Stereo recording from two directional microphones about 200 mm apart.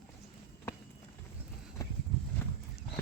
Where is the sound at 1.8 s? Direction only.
15° left (ahead or behind).